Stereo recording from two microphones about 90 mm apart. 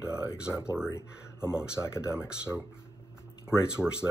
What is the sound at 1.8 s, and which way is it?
Speech, 30° left (ahead or behind).